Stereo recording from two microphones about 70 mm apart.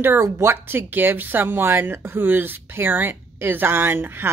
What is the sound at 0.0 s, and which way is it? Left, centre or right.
Speech, right.